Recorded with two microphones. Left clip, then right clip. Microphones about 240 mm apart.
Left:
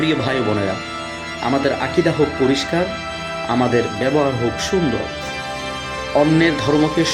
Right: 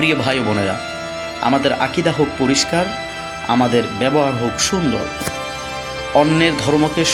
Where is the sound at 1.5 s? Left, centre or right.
Right.